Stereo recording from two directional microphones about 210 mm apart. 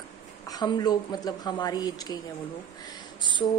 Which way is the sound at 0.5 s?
20° left (ahead or behind).